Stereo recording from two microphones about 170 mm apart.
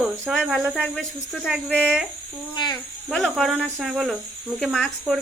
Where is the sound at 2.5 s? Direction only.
25° left (ahead or behind).